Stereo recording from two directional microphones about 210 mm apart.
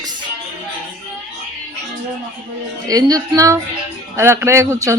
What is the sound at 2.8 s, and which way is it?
Speech, 15° right (ahead or behind).